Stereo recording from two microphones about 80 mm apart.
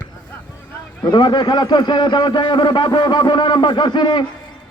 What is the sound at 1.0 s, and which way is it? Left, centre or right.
A man's voice, left.